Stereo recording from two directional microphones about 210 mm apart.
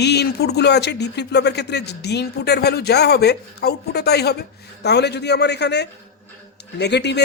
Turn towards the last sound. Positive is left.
turn(degrees=55)  # may be behind; listen again after turning